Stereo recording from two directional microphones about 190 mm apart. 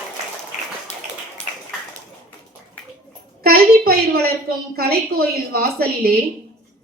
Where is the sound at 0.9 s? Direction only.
35° left (ahead or behind).